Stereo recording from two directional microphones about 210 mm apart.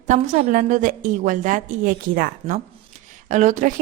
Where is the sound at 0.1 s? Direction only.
40° right (ahead or behind).